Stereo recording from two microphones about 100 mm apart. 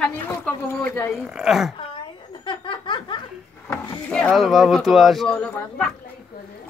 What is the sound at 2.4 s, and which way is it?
Laughter, 55° left (ahead or behind).